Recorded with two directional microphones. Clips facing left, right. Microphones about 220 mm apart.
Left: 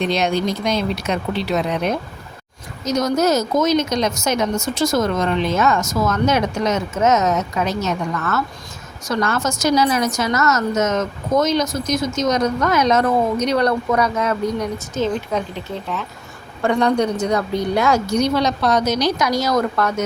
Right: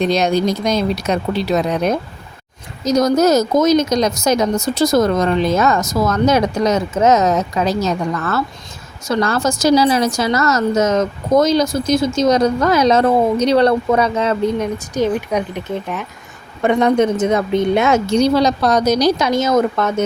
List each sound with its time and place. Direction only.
0.0 s speech: 40° right (ahead or behind)
14.9 s a woman's voice: 15° right (ahead or behind); by 19.3 s 40° right (ahead or behind)
19.3 s a woman's voice: 25° right (ahead or behind)